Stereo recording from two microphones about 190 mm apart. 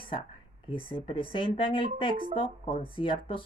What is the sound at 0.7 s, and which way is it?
A woman's voice, 25° left (ahead or behind).